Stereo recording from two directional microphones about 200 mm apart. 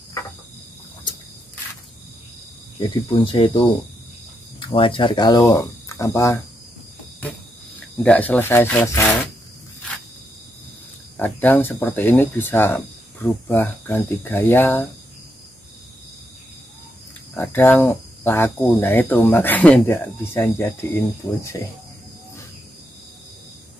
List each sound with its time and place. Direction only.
2.9 s speech: 25° left (ahead or behind)
8.0 s speech: 5° left (ahead or behind)
11.1 s speech: 10° left (ahead or behind)
17.4 s speech: 10° left (ahead or behind)